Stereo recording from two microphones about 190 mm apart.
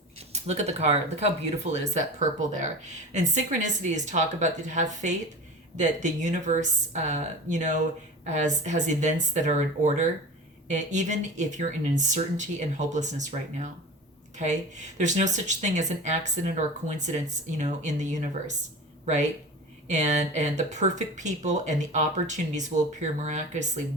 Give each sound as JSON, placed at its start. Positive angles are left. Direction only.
{"t": 0.3, "sound": "speech", "side_deg": -35}